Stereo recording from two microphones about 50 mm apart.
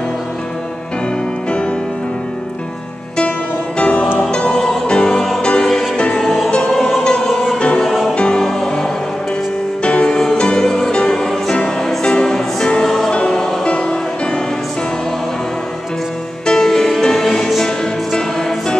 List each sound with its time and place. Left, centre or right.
3.2 s music: left
5.1 s music: centre
5.4 s music: centre
6.2 s music: centre
7.5 s music: left
7.8 s music: centre
8.1 s music: centre
9.8 s music: left; by 13.1 s centre
13.1 s music: centre
16.4 s music: centre